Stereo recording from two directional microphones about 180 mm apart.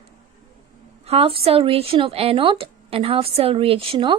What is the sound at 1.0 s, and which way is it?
Speech, 35° right (ahead or behind).